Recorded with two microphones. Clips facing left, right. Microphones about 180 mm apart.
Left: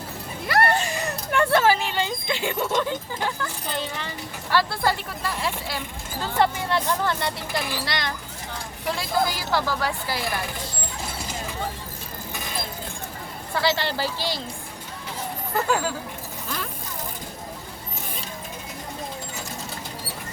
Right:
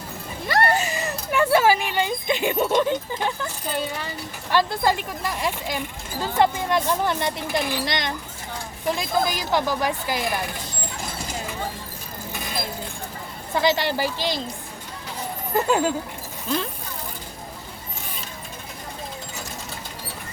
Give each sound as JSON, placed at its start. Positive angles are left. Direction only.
{"t": 0.4, "sound": "a sound", "side_deg": -5}
{"t": 4.5, "sound": "speech", "side_deg": -15}
{"t": 13.5, "sound": "speech", "side_deg": -15}
{"t": 15.5, "sound": "speech", "side_deg": -20}